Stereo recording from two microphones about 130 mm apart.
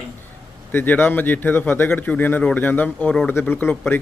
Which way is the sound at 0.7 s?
15° left (ahead or behind).